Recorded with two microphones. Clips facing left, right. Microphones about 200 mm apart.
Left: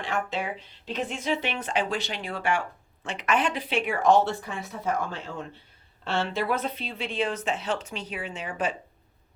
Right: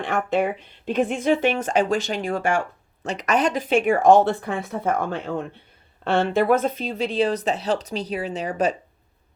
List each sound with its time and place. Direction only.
0.0 s speech: 55° right (ahead or behind); by 8.7 s 40° right (ahead or behind)